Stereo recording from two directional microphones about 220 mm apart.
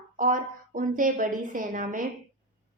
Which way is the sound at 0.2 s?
35° right (ahead or behind).